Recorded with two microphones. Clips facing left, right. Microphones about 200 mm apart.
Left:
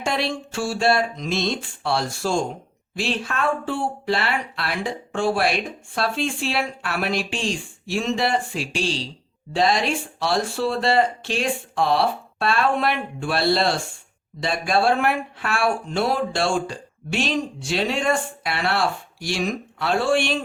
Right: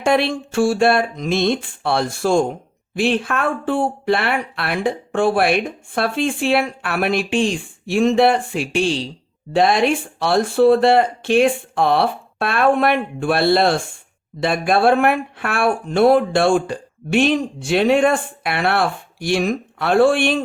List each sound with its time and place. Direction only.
0.0 s speech: 55° right (ahead or behind)